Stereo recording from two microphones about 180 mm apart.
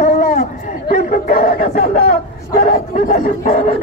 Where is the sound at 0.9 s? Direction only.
55° left (ahead or behind).